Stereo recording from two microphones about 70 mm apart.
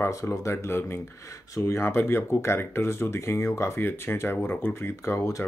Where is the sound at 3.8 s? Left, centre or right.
Left.